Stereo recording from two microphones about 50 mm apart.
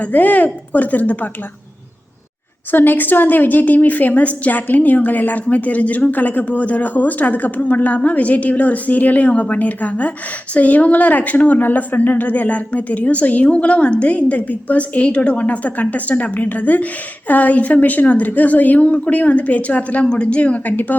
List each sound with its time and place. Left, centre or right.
0.0 s speech: left
2.7 s speech: left